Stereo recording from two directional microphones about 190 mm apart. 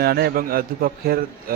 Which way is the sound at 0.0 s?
55° right (ahead or behind).